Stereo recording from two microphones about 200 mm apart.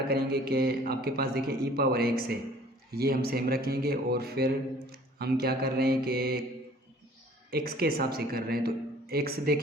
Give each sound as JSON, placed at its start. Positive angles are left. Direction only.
{"t": 0.1, "sound": "a man's voice", "side_deg": -50}
{"t": 7.5, "sound": "a man's voice", "side_deg": -50}